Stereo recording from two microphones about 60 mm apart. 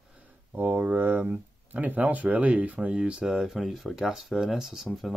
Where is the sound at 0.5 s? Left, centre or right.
Right.